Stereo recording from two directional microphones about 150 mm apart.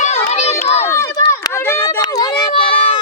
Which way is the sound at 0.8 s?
20° left (ahead or behind).